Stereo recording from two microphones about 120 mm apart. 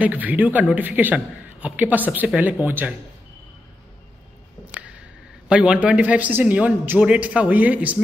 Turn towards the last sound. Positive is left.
turn(degrees=-10)  # may be behind; listen again after turning